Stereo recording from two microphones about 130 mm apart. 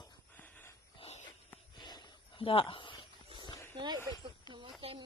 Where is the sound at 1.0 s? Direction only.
55° left (ahead or behind).